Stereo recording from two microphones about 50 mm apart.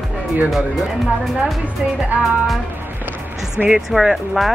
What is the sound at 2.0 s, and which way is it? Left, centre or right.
Music, right.